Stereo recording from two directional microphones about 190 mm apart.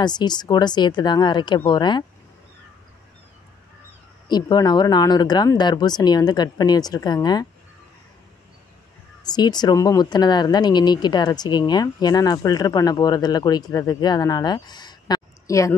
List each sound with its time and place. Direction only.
0.0 s speech: 20° left (ahead or behind)
4.3 s speech: 20° left (ahead or behind)
9.2 s speech: 20° left (ahead or behind)